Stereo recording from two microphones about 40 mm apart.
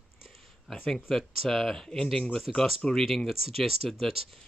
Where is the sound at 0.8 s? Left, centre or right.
Centre.